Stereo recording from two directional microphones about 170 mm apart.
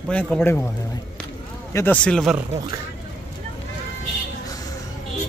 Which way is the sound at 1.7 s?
15° left (ahead or behind).